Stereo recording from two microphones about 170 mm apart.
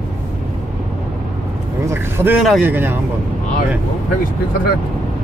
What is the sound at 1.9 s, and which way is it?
Speech, 15° right (ahead or behind).